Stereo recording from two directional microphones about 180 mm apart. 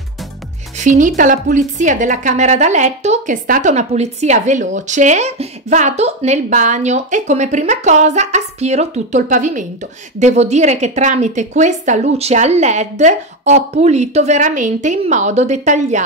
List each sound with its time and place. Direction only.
0.7 s a woman's voice: 45° right (ahead or behind)